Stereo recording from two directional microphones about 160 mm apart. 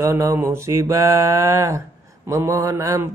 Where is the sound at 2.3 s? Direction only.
15° right (ahead or behind).